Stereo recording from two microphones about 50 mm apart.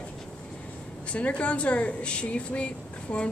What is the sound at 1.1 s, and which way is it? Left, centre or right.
Speech, left.